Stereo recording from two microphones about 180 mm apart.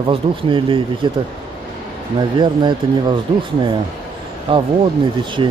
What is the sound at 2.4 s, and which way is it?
Speech, 25° right (ahead or behind).